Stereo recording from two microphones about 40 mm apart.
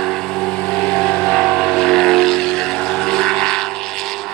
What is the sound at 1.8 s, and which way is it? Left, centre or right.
Vehicle, centre.